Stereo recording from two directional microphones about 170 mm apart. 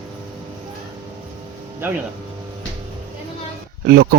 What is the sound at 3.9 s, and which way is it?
Speech, 70° right (ahead or behind).